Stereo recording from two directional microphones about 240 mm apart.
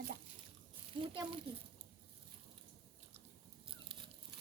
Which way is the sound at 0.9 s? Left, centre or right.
Centre.